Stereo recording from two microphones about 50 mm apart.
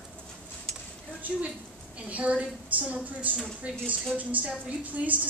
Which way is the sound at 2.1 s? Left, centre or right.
Right.